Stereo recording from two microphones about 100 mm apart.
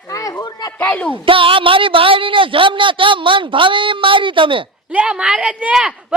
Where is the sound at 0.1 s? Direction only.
35° left (ahead or behind).